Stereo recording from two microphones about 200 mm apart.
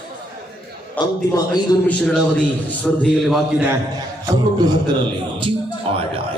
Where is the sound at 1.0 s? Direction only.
20° left (ahead or behind).